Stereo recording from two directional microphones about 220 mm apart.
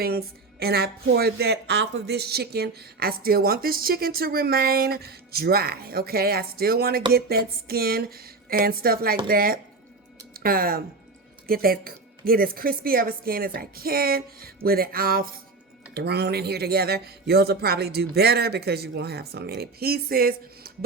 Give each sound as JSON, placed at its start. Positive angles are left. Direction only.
{"t": 0.0, "sound": "a woman's voice", "side_deg": -45}